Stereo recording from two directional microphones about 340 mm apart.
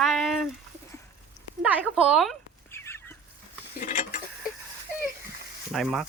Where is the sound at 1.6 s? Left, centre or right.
Centre.